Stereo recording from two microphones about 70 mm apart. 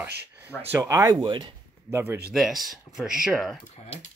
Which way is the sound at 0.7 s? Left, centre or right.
Right.